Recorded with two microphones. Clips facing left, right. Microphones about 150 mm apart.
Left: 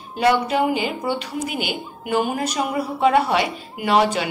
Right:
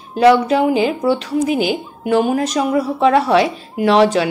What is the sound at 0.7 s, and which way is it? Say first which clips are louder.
Speech: right 7 dB; 5° left (ahead or behind).